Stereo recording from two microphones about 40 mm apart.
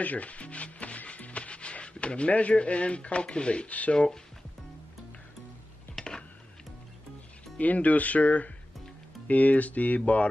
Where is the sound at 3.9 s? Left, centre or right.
Centre.